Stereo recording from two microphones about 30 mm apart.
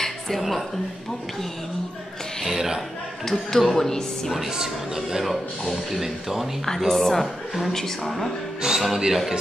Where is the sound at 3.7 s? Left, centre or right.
Centre.